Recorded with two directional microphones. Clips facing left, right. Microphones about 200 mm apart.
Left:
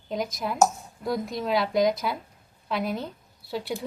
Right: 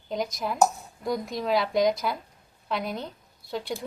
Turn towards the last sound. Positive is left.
turn(degrees=5)  # may be behind; listen again after turning